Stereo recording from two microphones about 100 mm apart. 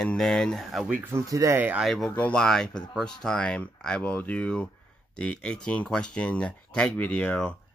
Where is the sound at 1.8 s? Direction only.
Centre (ahead or behind).